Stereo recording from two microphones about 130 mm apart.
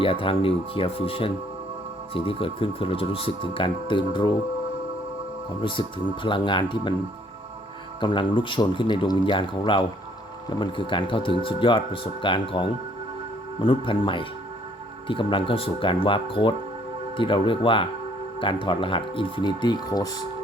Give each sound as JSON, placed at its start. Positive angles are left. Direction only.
{"t": 0.0, "sound": "speech", "side_deg": 45}
{"t": 6.2, "sound": "speech", "side_deg": 40}
{"t": 8.0, "sound": "speech", "side_deg": 40}